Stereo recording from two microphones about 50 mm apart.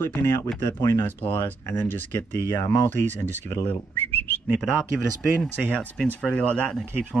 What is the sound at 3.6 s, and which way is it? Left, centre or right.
Speech, left.